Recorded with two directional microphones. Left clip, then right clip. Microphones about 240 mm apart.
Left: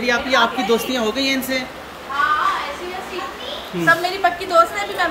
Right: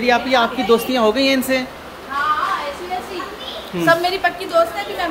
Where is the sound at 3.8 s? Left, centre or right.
Centre.